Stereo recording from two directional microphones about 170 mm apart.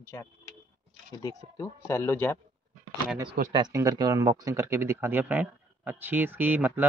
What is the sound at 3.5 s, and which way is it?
Speech, 20° right (ahead or behind).